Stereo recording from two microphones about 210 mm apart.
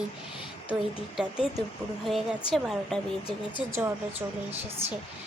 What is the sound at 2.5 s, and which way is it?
Speech, centre (ahead or behind).